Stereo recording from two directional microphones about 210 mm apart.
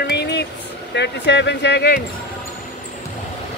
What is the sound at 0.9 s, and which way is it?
Speech, 55° left (ahead or behind).